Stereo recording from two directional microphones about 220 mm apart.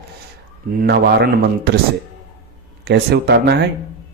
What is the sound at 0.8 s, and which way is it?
Speech, 45° right (ahead or behind).